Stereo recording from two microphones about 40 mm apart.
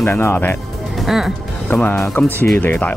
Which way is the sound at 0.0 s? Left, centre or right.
Left.